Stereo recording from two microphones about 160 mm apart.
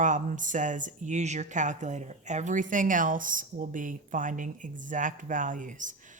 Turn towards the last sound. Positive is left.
turn(degrees=-55)  # may be behind; listen again after turning